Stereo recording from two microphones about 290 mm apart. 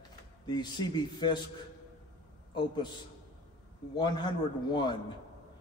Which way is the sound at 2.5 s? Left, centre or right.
Centre.